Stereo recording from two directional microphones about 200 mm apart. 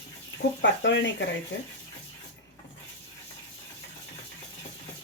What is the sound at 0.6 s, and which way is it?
Speech, 65° left (ahead or behind).